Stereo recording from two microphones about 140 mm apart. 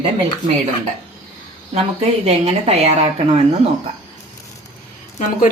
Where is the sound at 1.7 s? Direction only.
45° right (ahead or behind).